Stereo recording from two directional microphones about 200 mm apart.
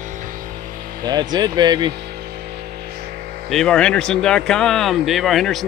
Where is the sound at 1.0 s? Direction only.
20° right (ahead or behind).